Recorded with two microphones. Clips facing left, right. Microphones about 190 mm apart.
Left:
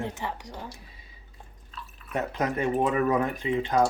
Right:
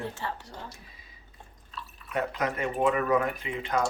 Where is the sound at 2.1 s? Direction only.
35° left (ahead or behind).